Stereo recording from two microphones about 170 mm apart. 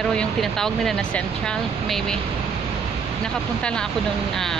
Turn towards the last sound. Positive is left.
turn(degrees=0)  # may be behind; listen again after turning